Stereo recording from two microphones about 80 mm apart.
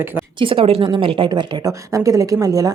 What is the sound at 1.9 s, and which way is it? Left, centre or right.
Speech, right.